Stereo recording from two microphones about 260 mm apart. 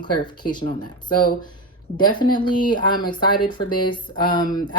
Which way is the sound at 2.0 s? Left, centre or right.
Centre.